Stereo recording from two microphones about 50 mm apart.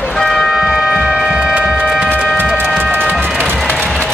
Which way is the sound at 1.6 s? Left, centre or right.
Centre.